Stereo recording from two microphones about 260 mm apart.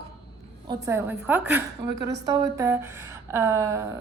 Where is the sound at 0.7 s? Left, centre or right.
Centre.